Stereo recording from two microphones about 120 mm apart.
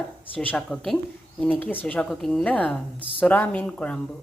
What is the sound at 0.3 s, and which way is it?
A woman's voice, 5° left (ahead or behind).